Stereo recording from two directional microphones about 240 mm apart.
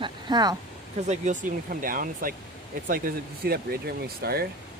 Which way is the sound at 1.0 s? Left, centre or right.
Right.